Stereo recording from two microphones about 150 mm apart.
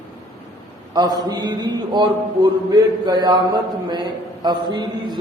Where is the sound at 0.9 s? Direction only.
25° right (ahead or behind).